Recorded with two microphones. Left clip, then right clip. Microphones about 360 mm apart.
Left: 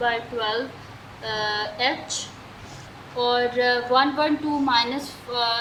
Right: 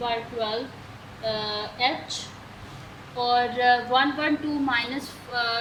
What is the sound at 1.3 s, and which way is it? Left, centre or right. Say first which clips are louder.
Speech: left 6 dB; centre.